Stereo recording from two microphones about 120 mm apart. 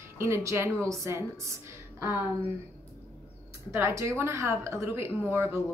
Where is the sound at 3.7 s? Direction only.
25° right (ahead or behind).